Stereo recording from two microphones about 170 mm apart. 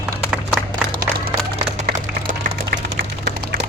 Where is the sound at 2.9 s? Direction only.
80° right.